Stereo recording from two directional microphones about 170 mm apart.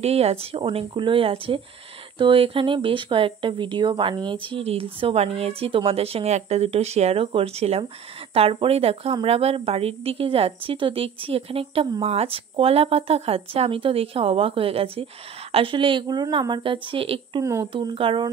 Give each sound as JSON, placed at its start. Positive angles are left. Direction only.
{"t": 0.0, "sound": "speech", "side_deg": -40}
{"t": 17.4, "sound": "speech", "side_deg": -15}
{"t": 17.7, "sound": "speech", "side_deg": -30}